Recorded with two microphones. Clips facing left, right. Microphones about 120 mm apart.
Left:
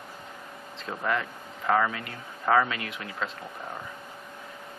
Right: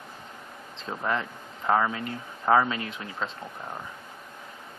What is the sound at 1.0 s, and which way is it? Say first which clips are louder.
Speech: even; 25° right (ahead or behind).